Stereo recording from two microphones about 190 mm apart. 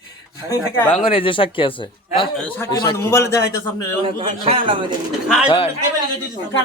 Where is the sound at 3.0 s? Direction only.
15° left (ahead or behind).